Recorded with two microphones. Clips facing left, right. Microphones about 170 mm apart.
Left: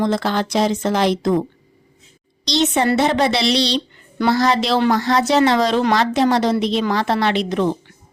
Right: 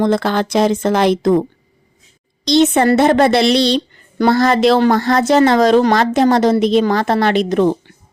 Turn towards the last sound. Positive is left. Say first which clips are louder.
# right 5 dB
turn(degrees=-45)  # may be behind; listen again after turning